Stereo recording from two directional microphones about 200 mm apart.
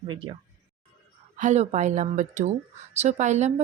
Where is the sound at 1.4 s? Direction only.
35° right (ahead or behind).